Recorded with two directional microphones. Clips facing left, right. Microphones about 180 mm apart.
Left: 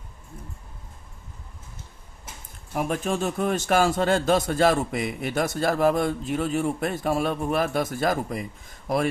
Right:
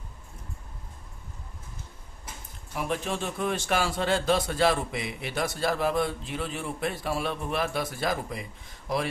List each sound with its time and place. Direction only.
2.7 s a man's voice: 45° left (ahead or behind)